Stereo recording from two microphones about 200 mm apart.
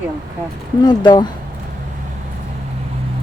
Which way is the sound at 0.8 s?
20° left (ahead or behind).